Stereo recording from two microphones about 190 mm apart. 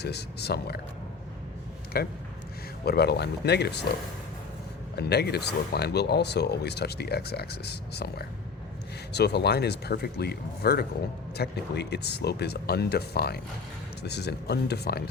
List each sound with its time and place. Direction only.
0.0 s speech: 60° left (ahead or behind)
1.9 s speech: 55° left (ahead or behind)
4.9 s speech: 60° left (ahead or behind)